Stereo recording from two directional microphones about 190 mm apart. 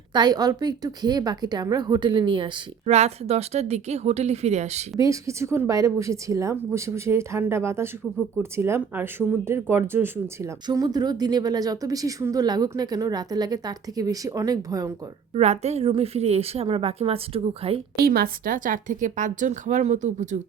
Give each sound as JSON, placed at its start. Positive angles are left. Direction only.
{"t": 0.1, "sound": "a woman's voice", "side_deg": -20}
{"t": 4.9, "sound": "a woman's voice", "side_deg": -15}
{"t": 15.4, "sound": "a woman's voice", "side_deg": -35}
{"t": 17.9, "sound": "a woman's voice", "side_deg": -55}